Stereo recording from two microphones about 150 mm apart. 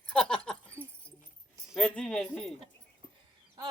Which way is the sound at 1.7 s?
5° left (ahead or behind).